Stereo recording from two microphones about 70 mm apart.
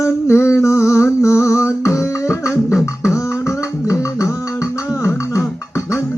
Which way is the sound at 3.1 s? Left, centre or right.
Left.